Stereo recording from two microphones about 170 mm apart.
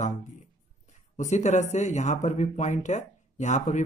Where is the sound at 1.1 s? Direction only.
45° left (ahead or behind).